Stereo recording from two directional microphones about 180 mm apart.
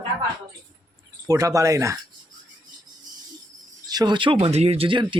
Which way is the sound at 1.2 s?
20° right (ahead or behind).